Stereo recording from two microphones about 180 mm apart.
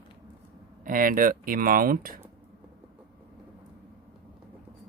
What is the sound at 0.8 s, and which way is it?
Speech, 50° right (ahead or behind).